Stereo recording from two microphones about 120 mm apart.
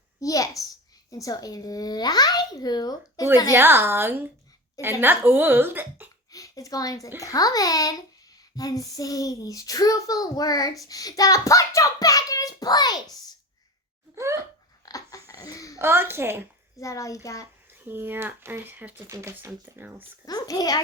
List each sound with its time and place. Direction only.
0.2 s a child's voice: 30° left (ahead or behind)
3.5 s a woman's voice: 20° right (ahead or behind)
6.3 s a child's voice: 30° left (ahead or behind)
10.8 s a sound: 30° left (ahead or behind)
14.2 s speech: 25° right (ahead or behind)
14.8 s dog: 30° left (ahead or behind)
15.5 s a sound: 25° left (ahead or behind)
15.8 s a woman's voice: 20° right (ahead or behind)
16.7 s a child's voice: 25° left (ahead or behind)
17.7 s speech: 15° right (ahead or behind)
20.2 s a child's voice: 30° left (ahead or behind)